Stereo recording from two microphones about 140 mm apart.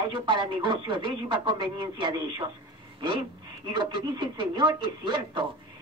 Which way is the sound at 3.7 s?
30° right (ahead or behind).